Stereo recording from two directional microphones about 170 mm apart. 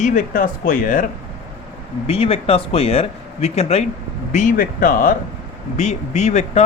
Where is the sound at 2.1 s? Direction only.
35° left (ahead or behind); by 5.1 s 55° left (ahead or behind).